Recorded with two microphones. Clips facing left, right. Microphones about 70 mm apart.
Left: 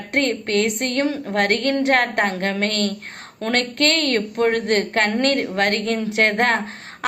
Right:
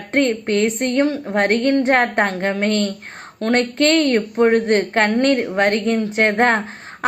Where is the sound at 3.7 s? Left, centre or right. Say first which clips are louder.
Right 5 dB; left.